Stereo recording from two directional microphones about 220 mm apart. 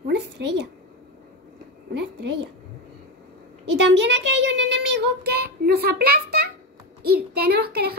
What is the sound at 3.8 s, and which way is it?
Speech, 55° right (ahead or behind).